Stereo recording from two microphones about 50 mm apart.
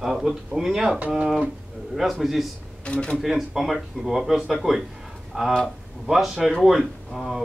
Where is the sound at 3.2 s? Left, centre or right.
Centre.